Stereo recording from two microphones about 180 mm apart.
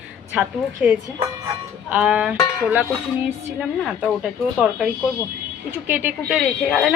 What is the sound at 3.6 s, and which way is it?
Speech, 5° right (ahead or behind).